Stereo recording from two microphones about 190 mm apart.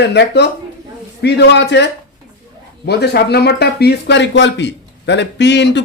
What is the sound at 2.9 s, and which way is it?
A man's voice, 60° left (ahead or behind).